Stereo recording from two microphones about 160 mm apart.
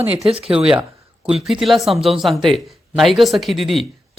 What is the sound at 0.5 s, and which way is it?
Speech, 5° right (ahead or behind).